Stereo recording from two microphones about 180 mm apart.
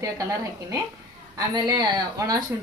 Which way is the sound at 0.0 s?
15° right (ahead or behind).